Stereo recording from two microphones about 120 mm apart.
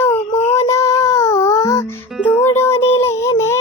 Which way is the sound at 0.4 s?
25° left (ahead or behind).